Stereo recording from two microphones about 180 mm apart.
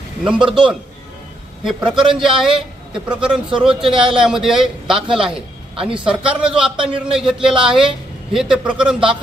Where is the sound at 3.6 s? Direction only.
5° right (ahead or behind).